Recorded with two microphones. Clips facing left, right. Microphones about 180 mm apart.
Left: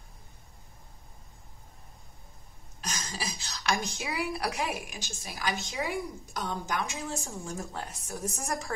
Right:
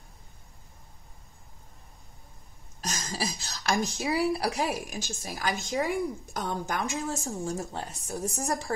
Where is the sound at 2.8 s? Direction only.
40° right (ahead or behind).